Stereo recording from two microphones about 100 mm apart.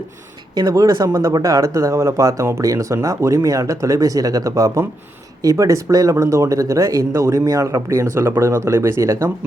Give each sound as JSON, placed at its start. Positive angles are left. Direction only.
{"t": 0.5, "sound": "speech", "side_deg": -40}